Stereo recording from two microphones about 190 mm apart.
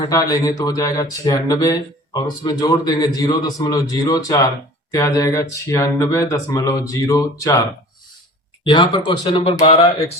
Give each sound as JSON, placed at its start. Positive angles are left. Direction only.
{"t": 0.0, "sound": "speech", "side_deg": 20}
{"t": 8.6, "sound": "speech", "side_deg": 25}